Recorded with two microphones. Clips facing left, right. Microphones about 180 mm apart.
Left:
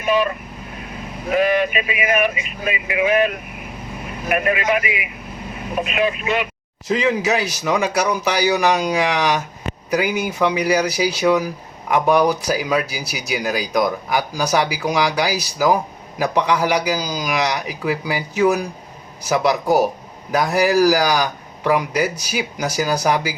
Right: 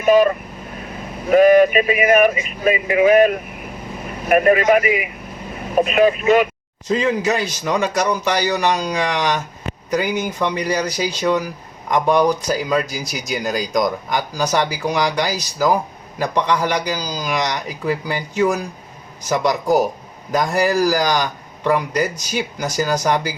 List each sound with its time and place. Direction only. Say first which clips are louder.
0.0 s speech: right 6 dB; 40° right (ahead or behind)
7.3 s speech: even; 10° left (ahead or behind)